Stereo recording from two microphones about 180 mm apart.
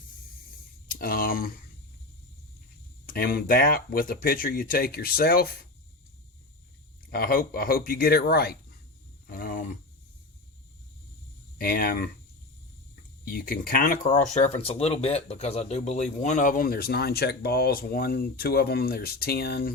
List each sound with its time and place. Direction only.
0.9 s speech: 55° left (ahead or behind)
3.1 s speech: 55° left (ahead or behind)
7.1 s speech: 55° left (ahead or behind)
9.2 s a sound: 55° left (ahead or behind)
11.5 s speech: 55° left (ahead or behind)
13.2 s speech: 55° left (ahead or behind)